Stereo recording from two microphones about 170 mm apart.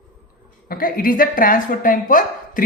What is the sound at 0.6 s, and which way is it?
Speech, 55° left (ahead or behind).